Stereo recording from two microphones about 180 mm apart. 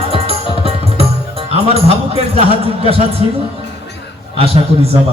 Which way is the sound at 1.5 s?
35° right (ahead or behind).